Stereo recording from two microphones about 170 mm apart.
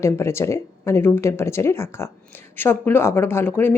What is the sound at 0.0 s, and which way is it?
Speech, 15° left (ahead or behind).